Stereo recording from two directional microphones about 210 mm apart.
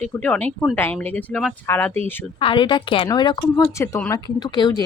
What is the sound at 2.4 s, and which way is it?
Speech, 25° left (ahead or behind).